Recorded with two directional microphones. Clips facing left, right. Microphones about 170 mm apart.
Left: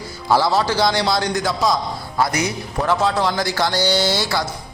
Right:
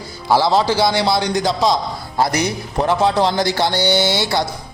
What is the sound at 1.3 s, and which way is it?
A man's voice, 35° right (ahead or behind).